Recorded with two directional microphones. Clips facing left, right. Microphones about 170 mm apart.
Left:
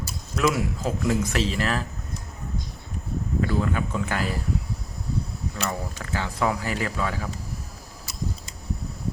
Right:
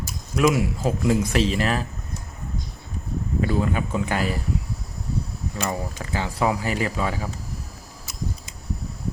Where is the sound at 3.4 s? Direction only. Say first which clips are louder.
Right 2 dB; 20° right (ahead or behind).